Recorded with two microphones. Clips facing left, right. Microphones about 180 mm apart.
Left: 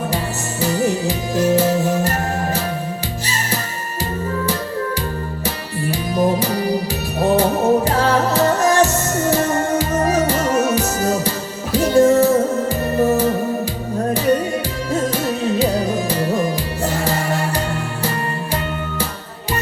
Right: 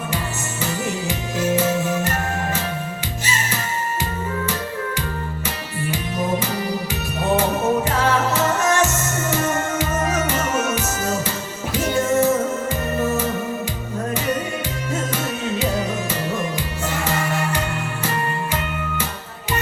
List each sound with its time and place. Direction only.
0.6 s music: 35° left (ahead or behind)
5.9 s music: 35° left (ahead or behind)
14.9 s music: 35° left (ahead or behind)